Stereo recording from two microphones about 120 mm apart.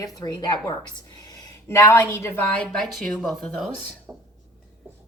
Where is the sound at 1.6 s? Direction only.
20° left (ahead or behind).